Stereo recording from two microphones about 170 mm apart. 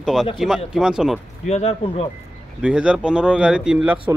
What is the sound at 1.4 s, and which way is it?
Speech, 40° left (ahead or behind).